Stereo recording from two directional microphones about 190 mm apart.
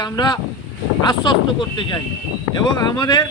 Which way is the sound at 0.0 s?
20° left (ahead or behind).